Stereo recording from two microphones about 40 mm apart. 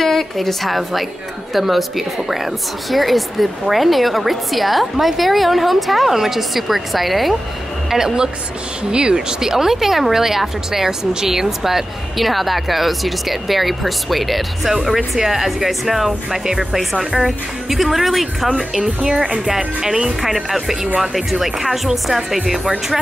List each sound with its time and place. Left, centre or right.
0.0 s a woman's voice: centre
7.9 s a woman's voice: centre
16.4 s a woman's voice: centre
18.6 s speech: centre
18.9 s speech: right
19.4 s speech: centre
20.2 s a woman's voice: centre